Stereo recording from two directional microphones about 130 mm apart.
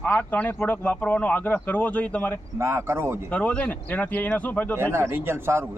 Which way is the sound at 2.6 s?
20° right (ahead or behind).